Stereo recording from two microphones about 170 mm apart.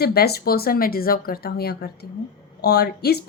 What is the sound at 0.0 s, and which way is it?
Speech, 65° left (ahead or behind).